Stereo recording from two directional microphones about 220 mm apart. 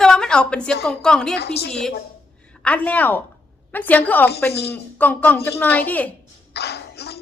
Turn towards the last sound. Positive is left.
turn(degrees=45)  # may be behind; listen again after turning